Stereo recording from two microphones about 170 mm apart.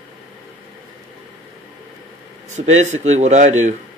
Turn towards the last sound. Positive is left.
turn(degrees=-45)  # may be behind; listen again after turning